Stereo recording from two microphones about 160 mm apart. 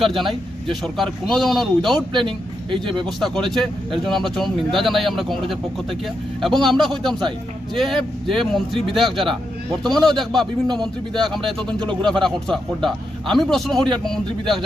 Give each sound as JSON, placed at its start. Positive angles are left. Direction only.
{"t": 0.0, "sound": "speech", "side_deg": 0}
{"t": 2.1, "sound": "speech", "side_deg": -30}
{"t": 3.2, "sound": "speech", "side_deg": 5}
{"t": 7.1, "sound": "speech", "side_deg": -25}
{"t": 7.8, "sound": "speech", "side_deg": 0}